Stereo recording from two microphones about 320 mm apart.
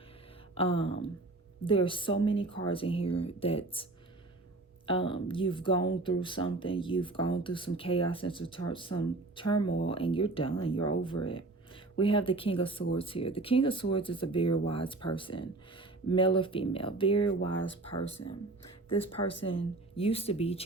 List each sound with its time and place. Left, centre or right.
0.5 s speech: centre
4.9 s speech: centre
18.9 s speech: centre